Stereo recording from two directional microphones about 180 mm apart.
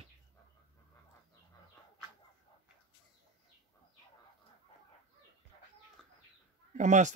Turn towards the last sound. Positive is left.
turn(degrees=-40)  # may be behind; listen again after turning